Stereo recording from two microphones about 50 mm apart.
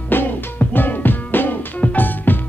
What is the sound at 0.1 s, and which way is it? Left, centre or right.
Music, left.